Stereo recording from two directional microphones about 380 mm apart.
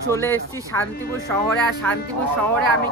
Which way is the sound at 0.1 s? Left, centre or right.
Centre.